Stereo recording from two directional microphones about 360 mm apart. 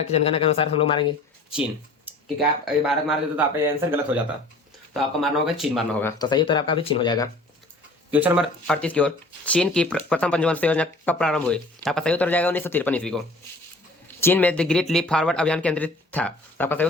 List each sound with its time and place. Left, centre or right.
0.1 s speech: centre
2.1 s a sound: centre
2.8 s speech: centre
8.1 s speech: centre